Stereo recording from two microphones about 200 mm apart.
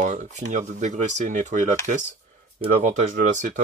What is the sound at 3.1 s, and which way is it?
Speech, 40° right (ahead or behind).